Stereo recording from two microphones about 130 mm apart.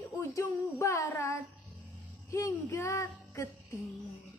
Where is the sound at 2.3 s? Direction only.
20° left (ahead or behind).